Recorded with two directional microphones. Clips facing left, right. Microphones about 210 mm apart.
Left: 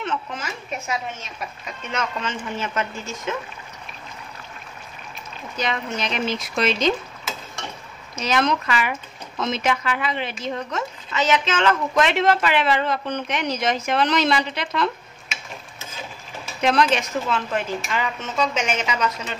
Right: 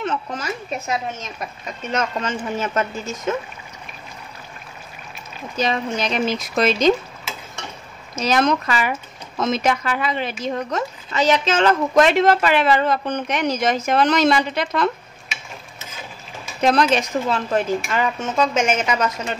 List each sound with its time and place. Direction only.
0.0 s speech: 40° right (ahead or behind)
5.6 s speech: 35° right (ahead or behind)
8.2 s a woman's voice: 40° right (ahead or behind)
16.6 s a woman's voice: 40° right (ahead or behind)